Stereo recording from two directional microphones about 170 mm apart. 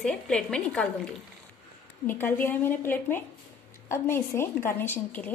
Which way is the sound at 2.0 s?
10° left (ahead or behind).